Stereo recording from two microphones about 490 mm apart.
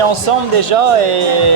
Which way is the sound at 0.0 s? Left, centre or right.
Right.